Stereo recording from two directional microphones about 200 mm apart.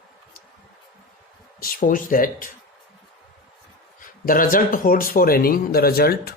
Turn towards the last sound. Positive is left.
turn(degrees=50)  # may be behind; listen again after turning